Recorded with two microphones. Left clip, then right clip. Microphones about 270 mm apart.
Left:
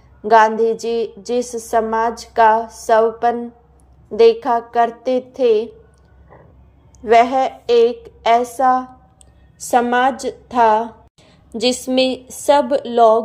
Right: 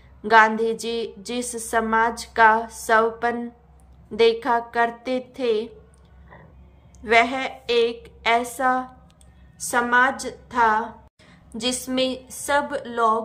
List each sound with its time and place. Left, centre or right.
0.3 s a woman's voice: centre
7.0 s a woman's voice: centre
9.7 s a woman's voice: centre